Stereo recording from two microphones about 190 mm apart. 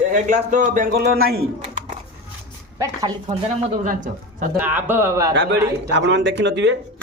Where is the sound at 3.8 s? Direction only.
40° right (ahead or behind).